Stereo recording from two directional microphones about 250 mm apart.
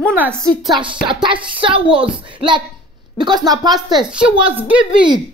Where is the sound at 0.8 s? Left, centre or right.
Centre.